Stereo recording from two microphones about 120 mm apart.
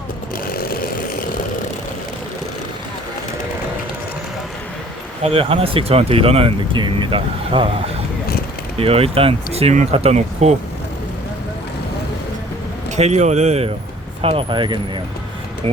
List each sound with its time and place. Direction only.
5.2 s speech: 55° right (ahead or behind)
8.8 s speech: 55° right (ahead or behind)
13.0 s speech: 70° right (ahead or behind)
14.2 s speech: 55° right (ahead or behind)